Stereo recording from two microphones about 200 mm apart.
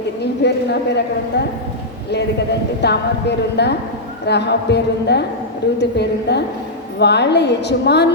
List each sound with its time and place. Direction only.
0.4 s a woman's voice: 55° left (ahead or behind)
2.8 s a woman's voice: 55° left (ahead or behind)